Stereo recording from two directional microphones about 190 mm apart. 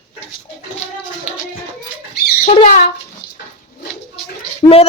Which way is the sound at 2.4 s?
40° left (ahead or behind).